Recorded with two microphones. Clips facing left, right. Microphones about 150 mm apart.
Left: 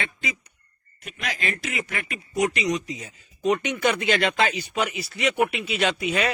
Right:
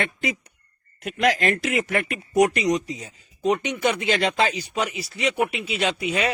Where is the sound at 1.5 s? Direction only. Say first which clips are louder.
Right 7 dB; 60° right (ahead or behind).